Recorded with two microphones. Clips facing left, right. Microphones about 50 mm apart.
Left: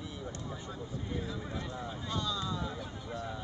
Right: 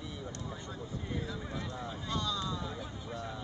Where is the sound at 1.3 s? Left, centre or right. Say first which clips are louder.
Even; centre.